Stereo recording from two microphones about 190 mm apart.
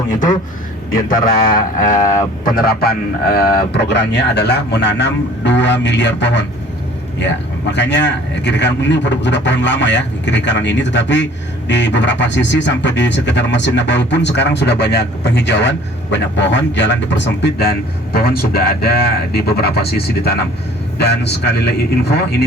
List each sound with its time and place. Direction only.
1.1 s a sound: 50° left (ahead or behind)
2.4 s a man's voice: 50° left (ahead or behind)
7.7 s speech: 65° left (ahead or behind)
18.1 s a man's voice: 50° left (ahead or behind)